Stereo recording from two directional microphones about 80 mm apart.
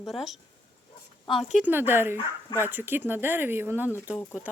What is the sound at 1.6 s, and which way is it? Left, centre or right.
Speech, right.